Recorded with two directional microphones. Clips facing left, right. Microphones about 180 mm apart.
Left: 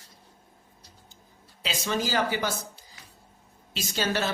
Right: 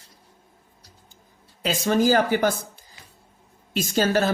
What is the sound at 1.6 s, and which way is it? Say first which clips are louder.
Speech: right 8 dB; 45° right (ahead or behind).